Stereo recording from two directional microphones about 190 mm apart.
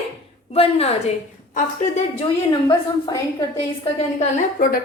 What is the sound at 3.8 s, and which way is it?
Speech, 35° left (ahead or behind).